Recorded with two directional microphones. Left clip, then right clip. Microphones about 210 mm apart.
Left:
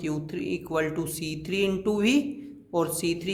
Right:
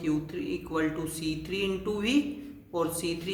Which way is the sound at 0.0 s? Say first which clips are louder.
Even; 50° left (ahead or behind).